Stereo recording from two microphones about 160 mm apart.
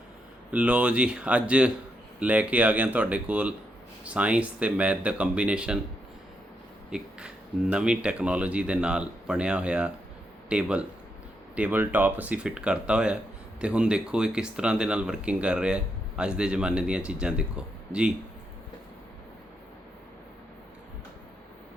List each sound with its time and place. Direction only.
0.5 s speech: 5° right (ahead or behind)
6.9 s speech: 5° right (ahead or behind)